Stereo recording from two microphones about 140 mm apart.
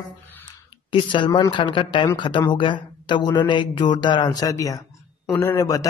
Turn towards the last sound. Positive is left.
turn(degrees=25)  # may be behind; listen again after turning